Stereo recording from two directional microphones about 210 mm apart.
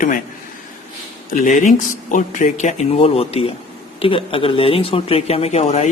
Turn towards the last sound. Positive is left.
turn(degrees=30)  # may be behind; listen again after turning